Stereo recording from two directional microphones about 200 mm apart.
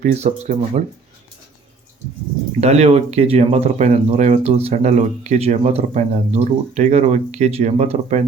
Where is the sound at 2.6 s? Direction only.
35° right (ahead or behind).